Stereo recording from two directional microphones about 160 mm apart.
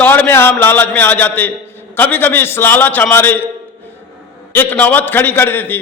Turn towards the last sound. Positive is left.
turn(degrees=10)  # may be behind; listen again after turning